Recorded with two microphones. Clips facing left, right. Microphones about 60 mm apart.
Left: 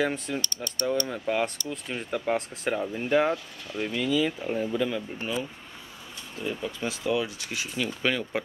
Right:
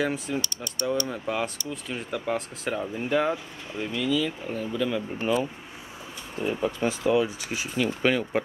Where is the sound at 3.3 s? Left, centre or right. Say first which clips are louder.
Left 1 dB; centre.